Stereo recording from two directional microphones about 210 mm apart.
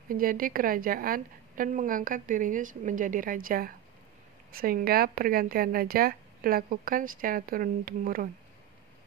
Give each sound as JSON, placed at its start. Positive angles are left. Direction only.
{"t": 0.1, "sound": "a woman's voice", "side_deg": -40}